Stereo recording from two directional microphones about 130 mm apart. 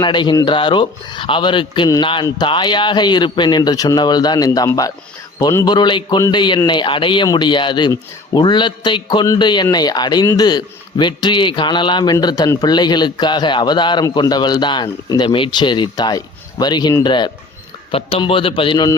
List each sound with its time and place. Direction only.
0.0 s speech: 35° left (ahead or behind)
5.7 s speech: 35° left (ahead or behind)
17.9 s speech: 45° left (ahead or behind)